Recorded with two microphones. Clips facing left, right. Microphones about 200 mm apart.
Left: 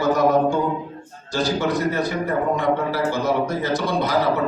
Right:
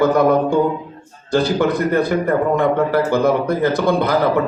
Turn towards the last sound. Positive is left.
turn(degrees=-55)  # may be behind; listen again after turning